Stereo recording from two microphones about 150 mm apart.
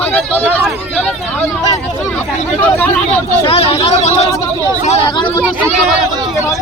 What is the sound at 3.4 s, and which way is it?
Speech, 40° left (ahead or behind).